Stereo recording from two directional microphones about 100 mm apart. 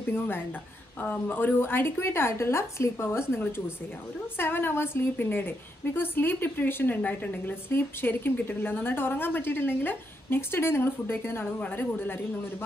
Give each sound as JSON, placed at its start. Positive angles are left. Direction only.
{"t": 1.0, "sound": "a woman's voice", "side_deg": 15}